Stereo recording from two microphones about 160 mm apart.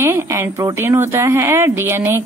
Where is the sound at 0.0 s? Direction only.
15° right (ahead or behind).